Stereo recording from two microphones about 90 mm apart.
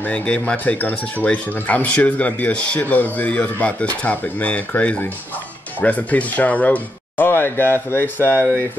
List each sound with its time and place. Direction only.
0.0 s speech: 15° left (ahead or behind)